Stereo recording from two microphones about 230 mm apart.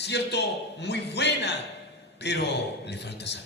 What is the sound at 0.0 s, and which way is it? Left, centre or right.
A man's voice, left.